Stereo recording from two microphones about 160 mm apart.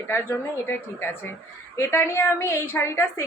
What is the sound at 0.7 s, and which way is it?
A woman's voice, 15° left (ahead or behind).